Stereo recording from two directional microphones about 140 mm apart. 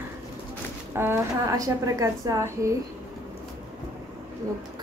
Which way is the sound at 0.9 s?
20° right (ahead or behind).